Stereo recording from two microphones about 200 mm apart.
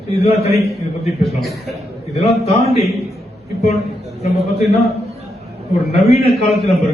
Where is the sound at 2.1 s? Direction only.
30° left (ahead or behind).